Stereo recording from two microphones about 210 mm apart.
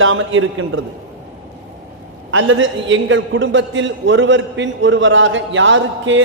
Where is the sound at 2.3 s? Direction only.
70° right (ahead or behind).